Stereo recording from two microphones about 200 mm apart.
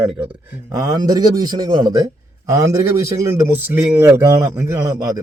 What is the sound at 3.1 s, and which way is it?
Speech, 15° right (ahead or behind).